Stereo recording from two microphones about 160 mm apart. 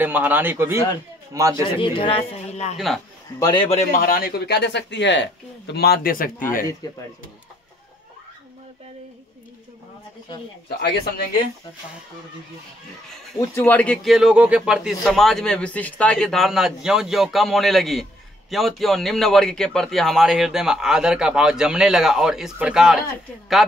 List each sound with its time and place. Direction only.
0.0 s speech: 10° right (ahead or behind)
1.5 s a man's voice: 35° left (ahead or behind)
3.3 s a man's voice: 25° left (ahead or behind)
3.9 s a man's voice: 70° left (ahead or behind)
10.8 s speech: 80° left
13.6 s speech: 10° left (ahead or behind)
14.0 s a man's voice: 5° right (ahead or behind)